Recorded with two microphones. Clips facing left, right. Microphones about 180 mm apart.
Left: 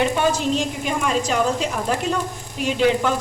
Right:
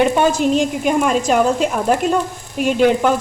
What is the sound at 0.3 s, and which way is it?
A woman's voice, 50° right (ahead or behind).